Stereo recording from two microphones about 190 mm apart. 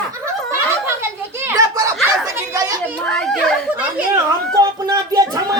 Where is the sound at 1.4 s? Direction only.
15° right (ahead or behind).